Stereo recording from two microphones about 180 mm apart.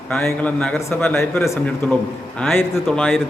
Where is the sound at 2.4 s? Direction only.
10° left (ahead or behind).